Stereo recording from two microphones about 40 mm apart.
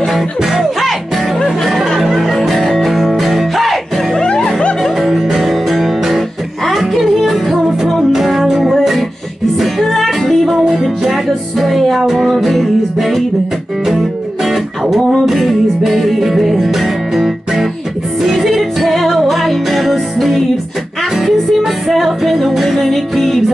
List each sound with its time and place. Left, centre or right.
0.0 s music: centre
4.2 s music: centre
4.8 s music: centre